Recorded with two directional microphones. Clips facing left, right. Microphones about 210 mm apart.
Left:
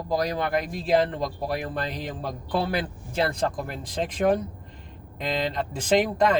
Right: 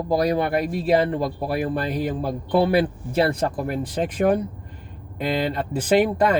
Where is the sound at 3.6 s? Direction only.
5° right (ahead or behind).